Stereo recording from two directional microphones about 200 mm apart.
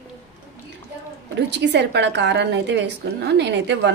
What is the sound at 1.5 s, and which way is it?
A woman's voice, 60° right (ahead or behind).